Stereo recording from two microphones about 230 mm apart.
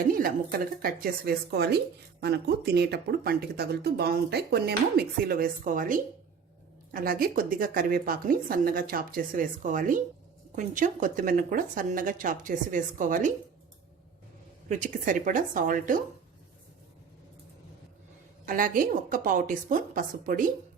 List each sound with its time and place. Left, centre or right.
0.1 s speech: right
14.7 s speech: right
18.4 s speech: right